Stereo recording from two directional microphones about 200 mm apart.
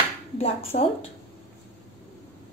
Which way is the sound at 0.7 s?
40° left (ahead or behind).